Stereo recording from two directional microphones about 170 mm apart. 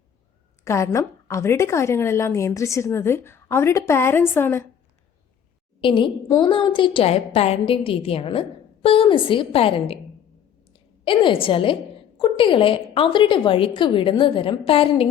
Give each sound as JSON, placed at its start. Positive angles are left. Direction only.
{"t": 0.6, "sound": "a woman's voice", "side_deg": 15}
{"t": 5.8, "sound": "a woman's voice", "side_deg": 30}